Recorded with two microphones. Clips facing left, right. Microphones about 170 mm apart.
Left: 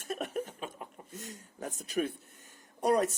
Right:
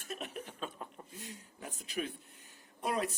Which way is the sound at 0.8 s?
15° left (ahead or behind).